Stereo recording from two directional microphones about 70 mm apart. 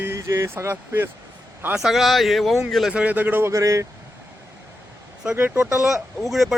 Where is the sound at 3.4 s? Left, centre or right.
Right.